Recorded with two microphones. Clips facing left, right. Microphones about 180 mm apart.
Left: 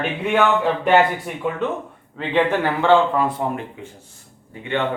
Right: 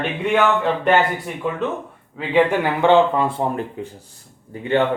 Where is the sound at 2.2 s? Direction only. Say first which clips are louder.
Right 2 dB; 10° right (ahead or behind); by 3.9 s 35° right (ahead or behind).